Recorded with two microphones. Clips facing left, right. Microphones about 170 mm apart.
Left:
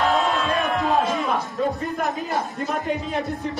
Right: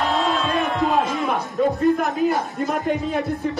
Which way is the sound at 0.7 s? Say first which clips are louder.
Right 1 dB; 20° right (ahead or behind).